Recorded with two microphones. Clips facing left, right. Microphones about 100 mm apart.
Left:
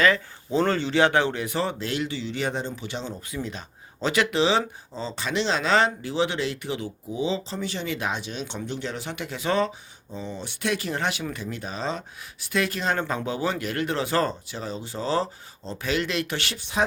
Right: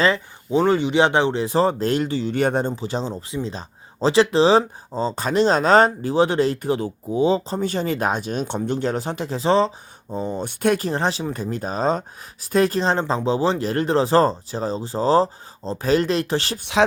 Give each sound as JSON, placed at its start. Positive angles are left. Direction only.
{"t": 0.0, "sound": "speech", "side_deg": -20}
{"t": 2.7, "sound": "speech", "side_deg": -35}
{"t": 10.1, "sound": "speech", "side_deg": -45}
{"t": 16.8, "sound": "speech", "side_deg": -90}